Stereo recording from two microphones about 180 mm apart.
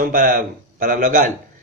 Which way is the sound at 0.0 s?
45° right (ahead or behind).